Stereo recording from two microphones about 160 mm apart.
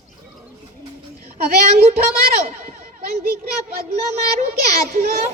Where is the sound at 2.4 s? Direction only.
60° right (ahead or behind).